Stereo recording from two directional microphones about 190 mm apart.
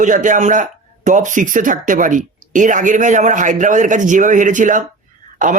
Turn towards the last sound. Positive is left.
turn(degrees=-45)  # may be behind; listen again after turning